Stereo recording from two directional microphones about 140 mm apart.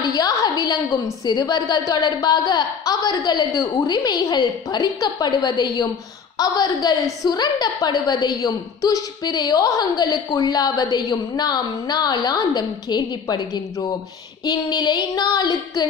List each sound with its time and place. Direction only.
0.1 s a woman's voice: 30° left (ahead or behind)
14.4 s child singing: 30° left (ahead or behind)